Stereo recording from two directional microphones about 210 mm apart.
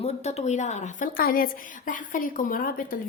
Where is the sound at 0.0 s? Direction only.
30° left (ahead or behind).